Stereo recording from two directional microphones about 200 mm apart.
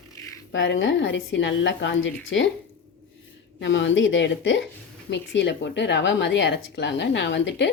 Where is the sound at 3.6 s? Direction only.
65° left (ahead or behind).